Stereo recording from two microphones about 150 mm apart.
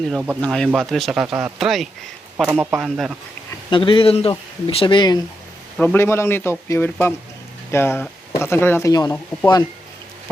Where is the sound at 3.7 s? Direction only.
35° left (ahead or behind).